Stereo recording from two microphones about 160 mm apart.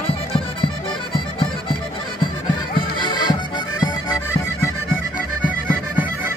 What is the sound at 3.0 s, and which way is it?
Music, 30° left (ahead or behind).